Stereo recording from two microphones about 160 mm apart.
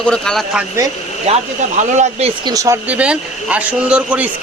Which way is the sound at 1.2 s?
45° right (ahead or behind).